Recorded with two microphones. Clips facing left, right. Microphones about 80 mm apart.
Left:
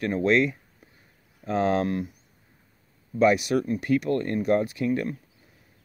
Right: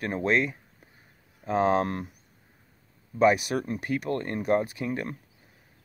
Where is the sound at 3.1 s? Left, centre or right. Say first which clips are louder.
Left 1 dB; right.